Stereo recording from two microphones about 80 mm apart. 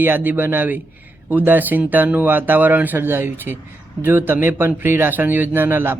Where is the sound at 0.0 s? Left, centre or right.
Right.